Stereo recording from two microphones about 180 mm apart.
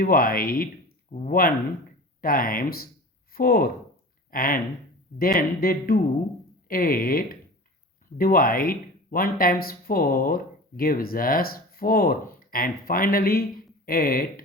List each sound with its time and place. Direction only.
0.0 s speech: 50° left (ahead or behind)